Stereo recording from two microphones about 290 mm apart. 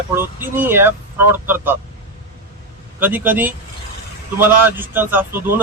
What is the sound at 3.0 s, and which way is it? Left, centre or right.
Speech, centre.